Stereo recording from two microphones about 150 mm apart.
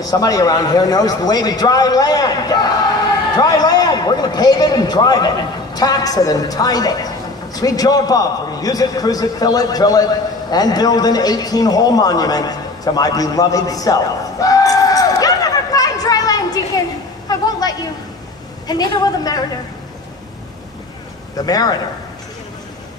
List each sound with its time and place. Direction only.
0.1 s a man's voice: 25° left (ahead or behind)
10.5 s a sound: 25° left (ahead or behind)
18.7 s a man's voice: 25° left (ahead or behind)
21.4 s a man's voice: 25° left (ahead or behind)